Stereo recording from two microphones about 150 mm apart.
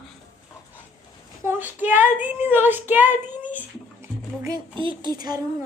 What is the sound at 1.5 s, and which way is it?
Child singing, 15° right (ahead or behind).